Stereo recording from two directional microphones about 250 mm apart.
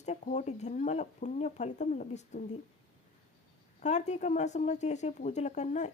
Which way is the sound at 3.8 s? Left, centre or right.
Left.